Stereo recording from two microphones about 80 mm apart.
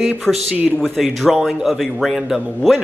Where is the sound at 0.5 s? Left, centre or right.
Right.